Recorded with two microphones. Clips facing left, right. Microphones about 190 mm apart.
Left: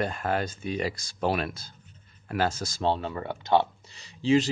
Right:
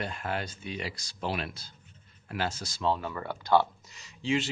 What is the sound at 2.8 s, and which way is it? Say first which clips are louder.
Speech: left 2 dB; 30° left (ahead or behind).